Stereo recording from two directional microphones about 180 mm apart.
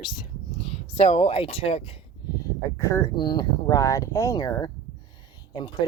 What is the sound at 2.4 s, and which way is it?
Speech, 15° left (ahead or behind).